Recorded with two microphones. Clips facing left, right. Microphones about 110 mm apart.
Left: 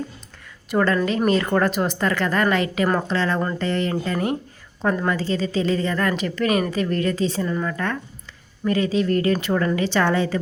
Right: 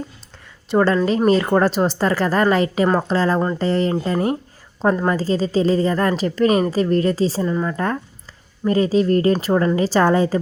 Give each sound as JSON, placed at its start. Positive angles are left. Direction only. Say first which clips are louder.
{"t": 0.7, "sound": "a woman's voice", "louder": "right 4 dB", "side_deg": -25}
{"t": 7.4, "sound": "speech", "louder": "right 3 dB", "side_deg": -20}
{"t": 8.6, "sound": "a woman's voice", "louder": "right 4 dB", "side_deg": -35}